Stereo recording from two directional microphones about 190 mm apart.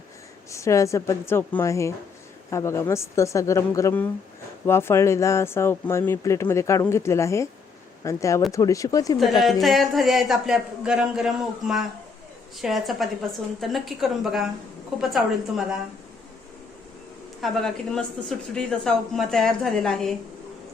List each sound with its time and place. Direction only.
0.5 s speech: 15° left (ahead or behind)
9.4 s speech: centre (ahead or behind)
17.4 s speech: centre (ahead or behind)